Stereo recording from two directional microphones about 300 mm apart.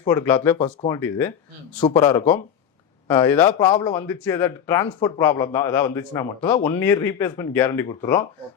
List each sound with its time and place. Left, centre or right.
0.1 s speech: centre